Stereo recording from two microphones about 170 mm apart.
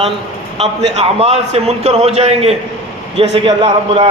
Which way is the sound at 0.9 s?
40° right (ahead or behind).